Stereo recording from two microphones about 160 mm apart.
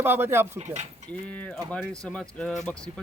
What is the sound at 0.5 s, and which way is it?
Speech, 45° right (ahead or behind).